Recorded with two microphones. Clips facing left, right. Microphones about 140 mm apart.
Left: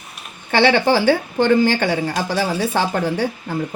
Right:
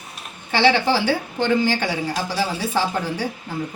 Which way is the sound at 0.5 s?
55° left (ahead or behind).